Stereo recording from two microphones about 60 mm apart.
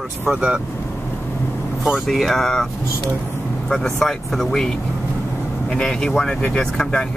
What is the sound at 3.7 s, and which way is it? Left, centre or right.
Speech, centre.